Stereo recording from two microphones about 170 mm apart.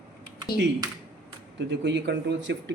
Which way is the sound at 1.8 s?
90° right.